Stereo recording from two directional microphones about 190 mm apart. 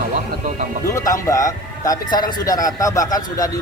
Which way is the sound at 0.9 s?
15° left (ahead or behind).